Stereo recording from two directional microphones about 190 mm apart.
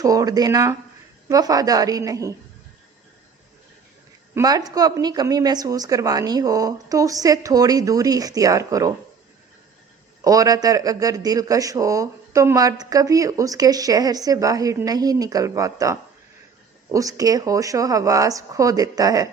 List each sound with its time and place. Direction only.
0.0 s a man's voice: 20° right (ahead or behind)
4.4 s a man's voice: 20° right (ahead or behind)
10.2 s a man's voice: 20° right (ahead or behind)